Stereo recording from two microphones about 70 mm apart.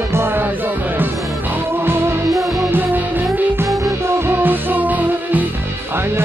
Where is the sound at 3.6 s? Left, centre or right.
Right.